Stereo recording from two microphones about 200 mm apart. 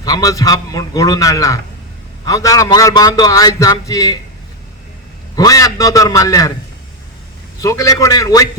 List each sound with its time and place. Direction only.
0.0 s a man's voice: 20° left (ahead or behind)
5.4 s a man's voice: 15° left (ahead or behind)
7.6 s a man's voice: 15° left (ahead or behind)